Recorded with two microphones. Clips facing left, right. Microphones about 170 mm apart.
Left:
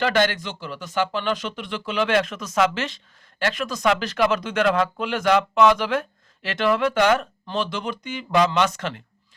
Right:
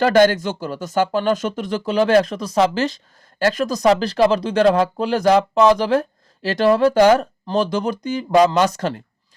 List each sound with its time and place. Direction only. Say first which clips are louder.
0.0 s speech: right 7 dB; 40° right (ahead or behind)